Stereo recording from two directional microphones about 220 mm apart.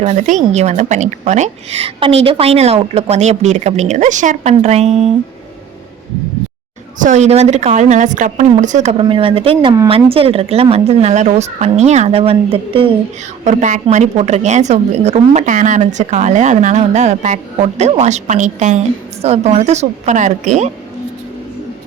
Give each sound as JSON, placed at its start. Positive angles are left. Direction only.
{"t": 0.0, "sound": "a woman's voice", "side_deg": -35}
{"t": 7.0, "sound": "a woman's voice", "side_deg": -30}